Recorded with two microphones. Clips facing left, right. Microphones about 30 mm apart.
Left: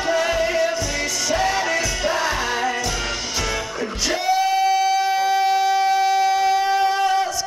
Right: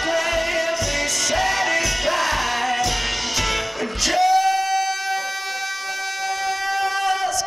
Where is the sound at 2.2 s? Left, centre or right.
Centre.